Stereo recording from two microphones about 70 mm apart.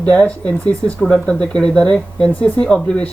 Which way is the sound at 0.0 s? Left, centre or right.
Centre.